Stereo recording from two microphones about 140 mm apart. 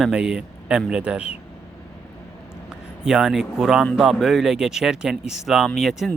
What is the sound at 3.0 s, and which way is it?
Speech, 5° right (ahead or behind).